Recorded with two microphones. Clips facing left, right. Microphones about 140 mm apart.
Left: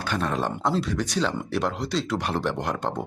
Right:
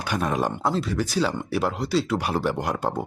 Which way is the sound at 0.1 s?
10° right (ahead or behind).